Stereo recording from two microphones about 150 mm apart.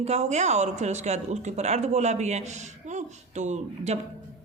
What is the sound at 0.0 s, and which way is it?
A woman's voice, 45° right (ahead or behind).